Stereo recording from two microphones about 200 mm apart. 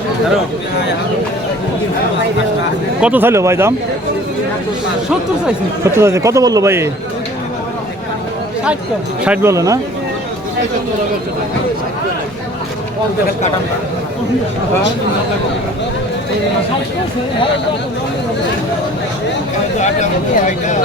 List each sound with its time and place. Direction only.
3.0 s a man's voice: 10° right (ahead or behind)
5.8 s a man's voice: 15° right (ahead or behind)
9.2 s a man's voice: 10° right (ahead or behind)
19.8 s speech: 35° left (ahead or behind)